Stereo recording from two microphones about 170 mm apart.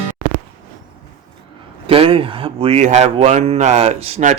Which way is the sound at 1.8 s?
30° right (ahead or behind).